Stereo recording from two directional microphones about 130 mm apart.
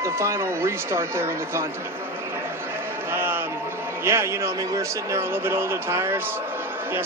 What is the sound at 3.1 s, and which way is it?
Chant, 15° right (ahead or behind).